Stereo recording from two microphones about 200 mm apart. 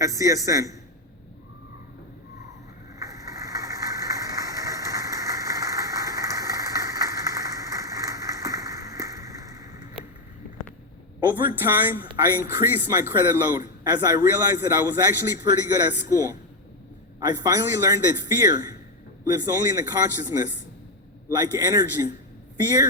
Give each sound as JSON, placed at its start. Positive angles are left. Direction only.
{"t": 0.0, "sound": "speech", "side_deg": -15}
{"t": 3.0, "sound": "a sound", "side_deg": -15}
{"t": 11.3, "sound": "speech", "side_deg": -10}